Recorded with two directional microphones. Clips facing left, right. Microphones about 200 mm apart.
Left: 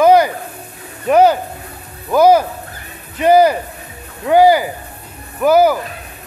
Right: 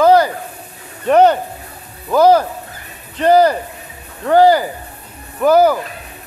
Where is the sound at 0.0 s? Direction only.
15° left (ahead or behind).